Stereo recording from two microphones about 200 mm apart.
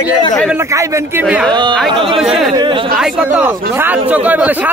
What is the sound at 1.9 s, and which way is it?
Speech, 25° right (ahead or behind).